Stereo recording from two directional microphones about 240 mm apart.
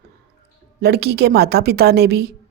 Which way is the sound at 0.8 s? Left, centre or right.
Right.